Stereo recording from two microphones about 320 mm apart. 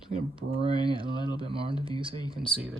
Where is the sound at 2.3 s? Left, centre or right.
Centre.